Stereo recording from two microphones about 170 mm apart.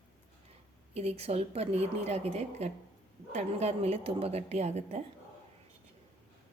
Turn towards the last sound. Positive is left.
turn(degrees=-40)  # may be behind; listen again after turning